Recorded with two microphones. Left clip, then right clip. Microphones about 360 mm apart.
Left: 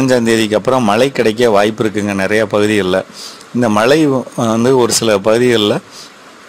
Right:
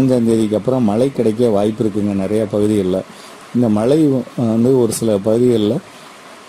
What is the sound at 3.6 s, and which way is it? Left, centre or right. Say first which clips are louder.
Speech: left 4 dB; left.